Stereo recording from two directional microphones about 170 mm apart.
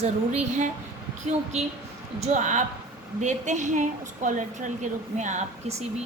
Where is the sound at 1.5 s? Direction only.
40° right (ahead or behind).